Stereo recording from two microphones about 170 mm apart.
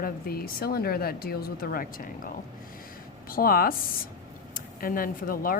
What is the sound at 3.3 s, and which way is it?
Speech, 60° left (ahead or behind).